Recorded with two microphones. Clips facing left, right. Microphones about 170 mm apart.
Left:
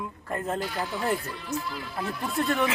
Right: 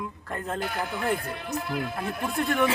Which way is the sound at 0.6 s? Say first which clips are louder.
Even; 55° right (ahead or behind).